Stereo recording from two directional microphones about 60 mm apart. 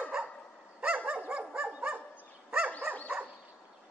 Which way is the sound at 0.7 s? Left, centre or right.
Right.